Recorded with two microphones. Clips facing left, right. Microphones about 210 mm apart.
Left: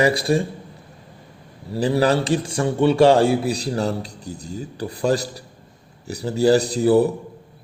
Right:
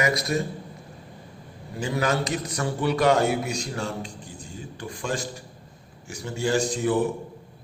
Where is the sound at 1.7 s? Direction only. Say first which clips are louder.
Left 7 dB; 35° left (ahead or behind).